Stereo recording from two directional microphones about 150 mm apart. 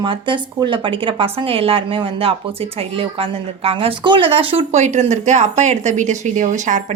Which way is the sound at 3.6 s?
35° right (ahead or behind).